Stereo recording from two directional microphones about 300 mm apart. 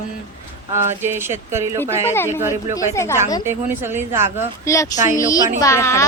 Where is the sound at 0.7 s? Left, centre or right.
Centre.